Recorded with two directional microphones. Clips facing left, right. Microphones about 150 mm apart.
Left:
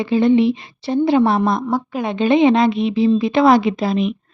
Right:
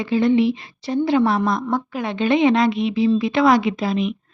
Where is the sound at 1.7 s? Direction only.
10° left (ahead or behind).